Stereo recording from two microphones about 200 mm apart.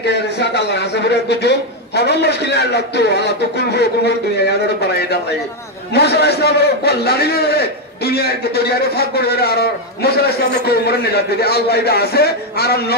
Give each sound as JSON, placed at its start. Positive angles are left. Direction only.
{"t": 0.0, "sound": "a man's voice", "side_deg": 55}
{"t": 5.9, "sound": "a man's voice", "side_deg": 55}